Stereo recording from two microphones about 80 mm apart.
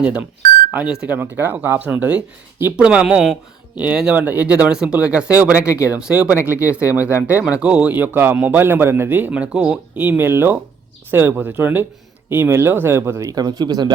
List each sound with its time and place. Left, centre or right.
0.0 s speech: centre
4.1 s speech: right
5.6 s speech: left
6.0 s speech: centre
10.0 s speech: right
13.3 s speech: right